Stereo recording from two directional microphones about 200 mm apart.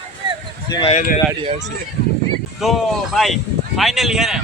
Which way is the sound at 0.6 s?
20° left (ahead or behind).